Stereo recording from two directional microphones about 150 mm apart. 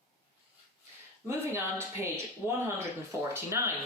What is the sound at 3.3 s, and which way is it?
Speech, 20° right (ahead or behind).